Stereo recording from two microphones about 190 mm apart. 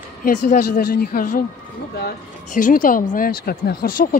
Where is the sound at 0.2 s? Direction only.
50° left (ahead or behind).